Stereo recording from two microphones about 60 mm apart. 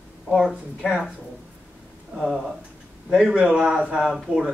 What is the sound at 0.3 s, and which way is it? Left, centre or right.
Speech, centre.